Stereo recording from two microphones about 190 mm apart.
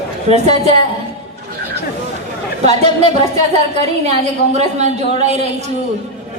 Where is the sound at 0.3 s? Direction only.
35° right (ahead or behind).